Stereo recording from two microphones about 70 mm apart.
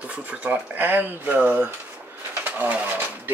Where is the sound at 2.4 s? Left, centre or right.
Right.